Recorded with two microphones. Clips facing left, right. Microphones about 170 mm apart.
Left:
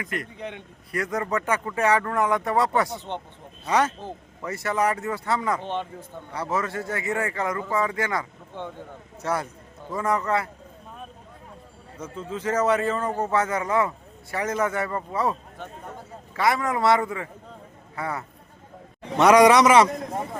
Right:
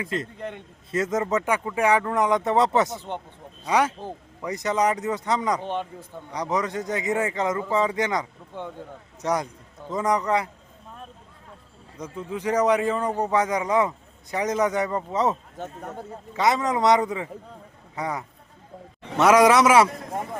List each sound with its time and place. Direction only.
0.0 s speech: 25° right (ahead or behind)
0.3 s a man's voice: centre (ahead or behind)
0.9 s speech: 20° right (ahead or behind)
11.9 s speech: 15° right (ahead or behind)
19.1 s a man's voice: centre (ahead or behind)